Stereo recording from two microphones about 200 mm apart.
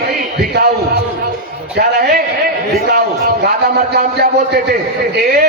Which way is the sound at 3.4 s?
55° right (ahead or behind).